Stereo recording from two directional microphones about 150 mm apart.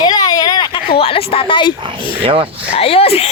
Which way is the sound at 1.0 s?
40° left (ahead or behind).